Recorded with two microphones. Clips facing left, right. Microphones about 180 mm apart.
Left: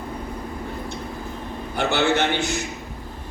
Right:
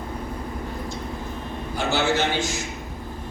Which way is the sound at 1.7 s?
60° left (ahead or behind).